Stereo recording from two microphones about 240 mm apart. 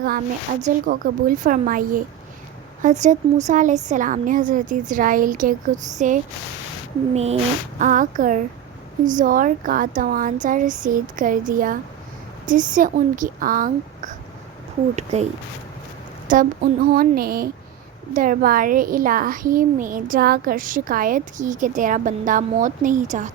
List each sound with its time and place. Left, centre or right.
0.6 s speech: right
16.2 s a sound: right
16.9 s speech: right